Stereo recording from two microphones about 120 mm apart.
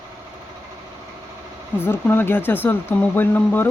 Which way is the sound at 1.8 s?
20° left (ahead or behind).